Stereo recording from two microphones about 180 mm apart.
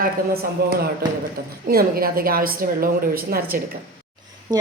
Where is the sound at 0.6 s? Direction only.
60° right (ahead or behind).